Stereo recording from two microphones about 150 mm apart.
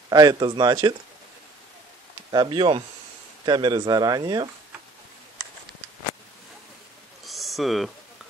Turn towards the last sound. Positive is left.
turn(degrees=0)  # may be behind; listen again after turning